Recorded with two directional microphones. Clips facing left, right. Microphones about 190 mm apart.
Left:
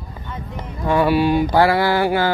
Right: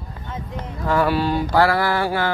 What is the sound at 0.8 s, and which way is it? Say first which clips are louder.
Mantra: left 3 dB; 15° left (ahead or behind).